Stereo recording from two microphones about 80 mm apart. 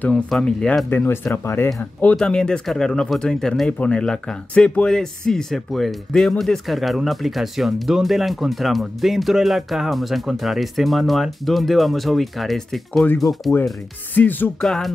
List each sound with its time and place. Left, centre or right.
0.1 s speech: centre
0.8 s music: left
1.4 s speech: left
1.8 s music: centre
2.1 s speech: centre
14.1 s music: left
14.6 s speech: centre